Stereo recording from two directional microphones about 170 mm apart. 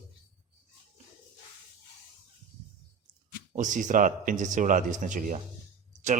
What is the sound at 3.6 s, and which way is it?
Speech, 45° right (ahead or behind).